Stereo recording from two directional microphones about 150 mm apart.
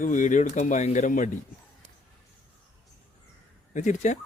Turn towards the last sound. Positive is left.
turn(degrees=55)  # may be behind; listen again after turning